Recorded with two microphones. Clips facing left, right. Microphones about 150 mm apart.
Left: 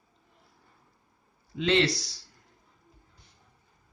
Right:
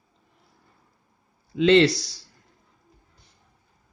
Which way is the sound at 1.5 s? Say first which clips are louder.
Right 9 dB; 90° right.